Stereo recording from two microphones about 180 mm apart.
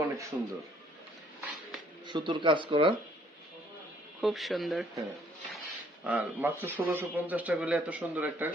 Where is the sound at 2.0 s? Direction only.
25° right (ahead or behind).